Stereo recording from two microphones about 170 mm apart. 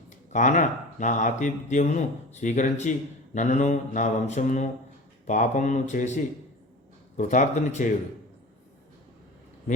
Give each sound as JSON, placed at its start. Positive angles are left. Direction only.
{"t": 0.3, "sound": "speech", "side_deg": 45}
{"t": 7.2, "sound": "speech", "side_deg": 45}